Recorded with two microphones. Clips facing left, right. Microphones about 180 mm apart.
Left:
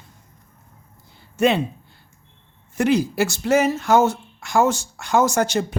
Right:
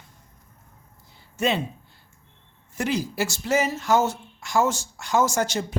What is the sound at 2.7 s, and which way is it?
Speech, 60° left (ahead or behind).